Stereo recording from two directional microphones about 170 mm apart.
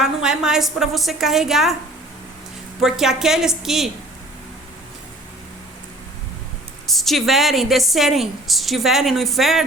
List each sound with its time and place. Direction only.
0.0 s a woman's voice: 5° right (ahead or behind)
2.8 s a woman's voice: centre (ahead or behind)
6.8 s a woman's voice: centre (ahead or behind)